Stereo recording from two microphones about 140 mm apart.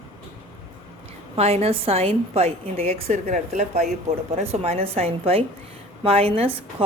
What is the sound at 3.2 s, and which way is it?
A woman's voice, 60° right (ahead or behind).